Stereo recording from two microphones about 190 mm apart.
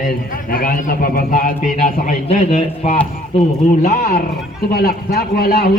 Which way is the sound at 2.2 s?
35° left (ahead or behind).